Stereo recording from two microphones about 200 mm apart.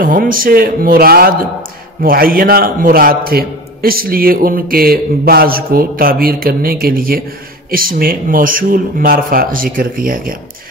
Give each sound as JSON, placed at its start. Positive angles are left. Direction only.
{"t": 0.0, "sound": "a man's voice", "side_deg": -45}